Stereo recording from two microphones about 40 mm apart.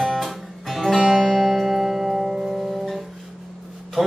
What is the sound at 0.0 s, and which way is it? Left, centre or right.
Music, centre.